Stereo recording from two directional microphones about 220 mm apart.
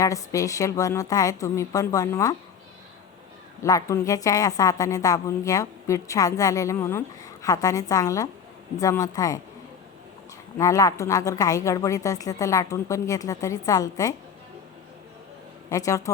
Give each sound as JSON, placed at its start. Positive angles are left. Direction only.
{"t": 0.0, "sound": "a woman's voice", "side_deg": 15}
{"t": 3.6, "sound": "a woman's voice", "side_deg": 15}
{"t": 10.6, "sound": "a woman's voice", "side_deg": 15}
{"t": 15.7, "sound": "a woman's voice", "side_deg": 15}